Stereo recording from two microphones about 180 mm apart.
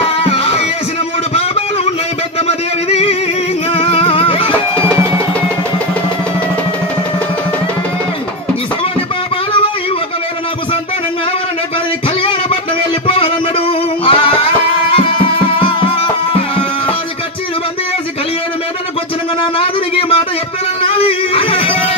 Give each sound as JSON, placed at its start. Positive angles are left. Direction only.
{"t": 0.2, "sound": "music", "side_deg": 35}
{"t": 1.3, "sound": "a sound", "side_deg": 35}
{"t": 3.7, "sound": "music", "side_deg": 35}
{"t": 12.2, "sound": "music", "side_deg": 30}
{"t": 19.6, "sound": "a sound", "side_deg": 30}
{"t": 20.8, "sound": "music", "side_deg": 30}